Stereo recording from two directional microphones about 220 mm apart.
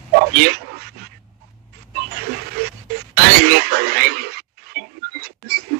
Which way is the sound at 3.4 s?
45° right (ahead or behind).